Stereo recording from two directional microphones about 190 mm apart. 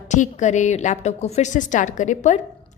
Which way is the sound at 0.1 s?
40° left (ahead or behind).